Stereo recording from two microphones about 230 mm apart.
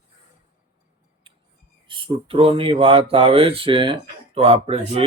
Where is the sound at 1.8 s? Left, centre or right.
Right.